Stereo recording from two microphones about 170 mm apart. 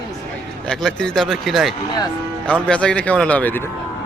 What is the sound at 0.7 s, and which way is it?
Speech, 5° left (ahead or behind).